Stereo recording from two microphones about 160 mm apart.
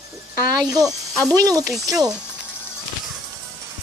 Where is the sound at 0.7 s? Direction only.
20° right (ahead or behind).